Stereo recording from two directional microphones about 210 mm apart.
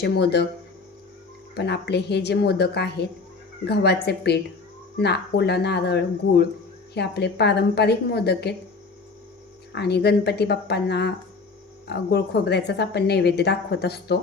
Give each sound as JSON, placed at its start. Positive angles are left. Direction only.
{"t": 0.0, "sound": "a woman's voice", "side_deg": 50}
{"t": 1.5, "sound": "a woman's voice", "side_deg": 55}
{"t": 9.7, "sound": "a woman's voice", "side_deg": 50}